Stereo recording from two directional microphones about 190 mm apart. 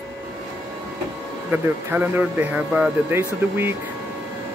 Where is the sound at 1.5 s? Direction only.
10° right (ahead or behind).